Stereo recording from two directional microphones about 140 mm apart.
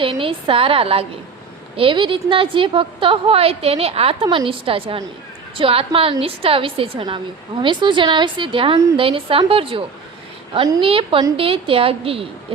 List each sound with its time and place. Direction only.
0.0 s a woman's voice: 40° right (ahead or behind)